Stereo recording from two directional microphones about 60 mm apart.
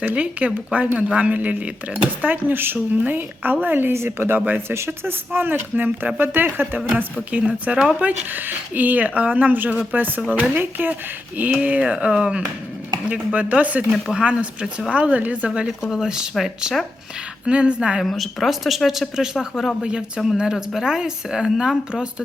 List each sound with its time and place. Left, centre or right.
0.0 s a woman's voice: right
4.4 s a woman's voice: right
4.7 s a woman's voice: right
8.3 s a woman's voice: right
11.6 s a woman's voice: right
15.8 s a woman's voice: centre
17.4 s a woman's voice: centre
18.0 s a woman's voice: centre